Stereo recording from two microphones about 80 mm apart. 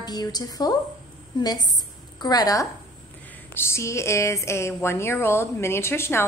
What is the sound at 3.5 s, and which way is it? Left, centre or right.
Speech, left.